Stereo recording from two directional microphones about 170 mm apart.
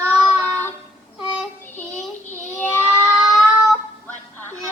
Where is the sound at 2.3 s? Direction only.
10° left (ahead or behind).